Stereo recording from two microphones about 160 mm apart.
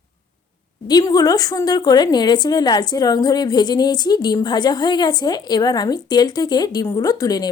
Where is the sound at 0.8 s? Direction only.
25° left (ahead or behind).